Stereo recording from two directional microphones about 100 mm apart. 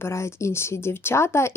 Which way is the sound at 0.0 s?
25° left (ahead or behind).